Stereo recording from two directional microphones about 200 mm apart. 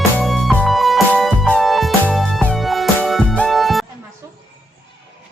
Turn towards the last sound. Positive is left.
turn(degrees=0)  # may be behind; listen again after turning